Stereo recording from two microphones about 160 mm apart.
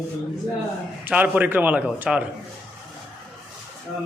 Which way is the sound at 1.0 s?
10° right (ahead or behind).